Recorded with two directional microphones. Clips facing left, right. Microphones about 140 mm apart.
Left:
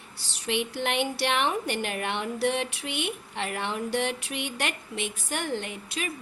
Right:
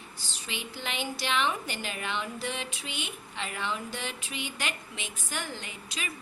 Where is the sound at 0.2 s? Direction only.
75° left (ahead or behind).